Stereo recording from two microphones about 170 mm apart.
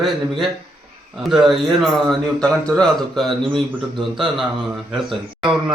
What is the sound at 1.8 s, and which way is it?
Speech, 5° left (ahead or behind).